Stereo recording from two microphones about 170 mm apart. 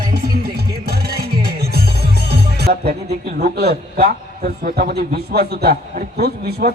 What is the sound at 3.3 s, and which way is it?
A man's voice, 70° right (ahead or behind).